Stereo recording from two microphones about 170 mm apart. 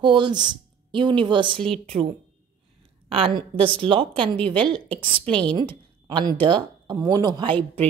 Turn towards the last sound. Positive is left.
turn(degrees=-25)  # may be behind; listen again after turning